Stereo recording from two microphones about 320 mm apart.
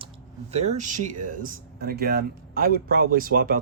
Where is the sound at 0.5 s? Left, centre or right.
Right.